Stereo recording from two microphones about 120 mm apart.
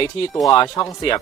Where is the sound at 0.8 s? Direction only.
30° left (ahead or behind).